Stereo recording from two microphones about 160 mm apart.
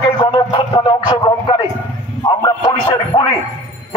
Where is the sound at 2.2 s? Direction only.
25° left (ahead or behind).